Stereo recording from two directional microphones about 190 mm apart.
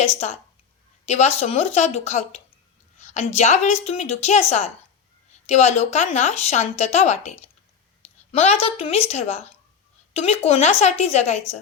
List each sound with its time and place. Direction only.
0.0 s a woman's voice: 35° left (ahead or behind)